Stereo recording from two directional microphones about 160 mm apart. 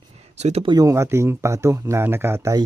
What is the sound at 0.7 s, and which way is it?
Speech, 20° right (ahead or behind).